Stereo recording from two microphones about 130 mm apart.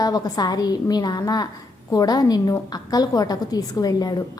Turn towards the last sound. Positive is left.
turn(degrees=30)  # may be behind; listen again after turning